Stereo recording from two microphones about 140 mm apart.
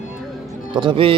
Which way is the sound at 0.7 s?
35° right (ahead or behind).